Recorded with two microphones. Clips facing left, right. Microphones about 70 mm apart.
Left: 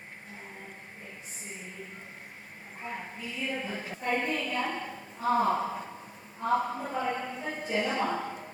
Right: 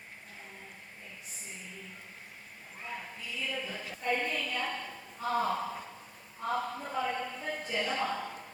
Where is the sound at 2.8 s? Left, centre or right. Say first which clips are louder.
Left 3 dB; left.